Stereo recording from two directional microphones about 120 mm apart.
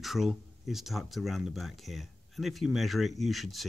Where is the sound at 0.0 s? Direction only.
Centre (ahead or behind).